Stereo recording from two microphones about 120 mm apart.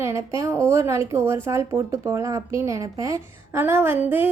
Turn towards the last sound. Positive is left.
turn(degrees=-15)  # may be behind; listen again after turning